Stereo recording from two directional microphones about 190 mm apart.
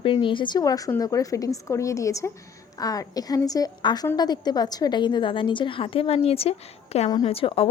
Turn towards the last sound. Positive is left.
turn(degrees=30)  # may be behind; listen again after turning